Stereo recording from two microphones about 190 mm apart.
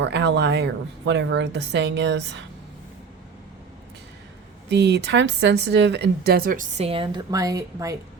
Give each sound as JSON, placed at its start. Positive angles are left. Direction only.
{"t": 0.0, "sound": "a woman's voice", "side_deg": -65}
{"t": 4.7, "sound": "speech", "side_deg": -60}
{"t": 6.8, "sound": "a woman's voice", "side_deg": -30}